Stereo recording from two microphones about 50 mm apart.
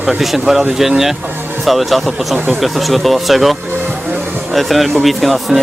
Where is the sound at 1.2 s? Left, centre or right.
Right.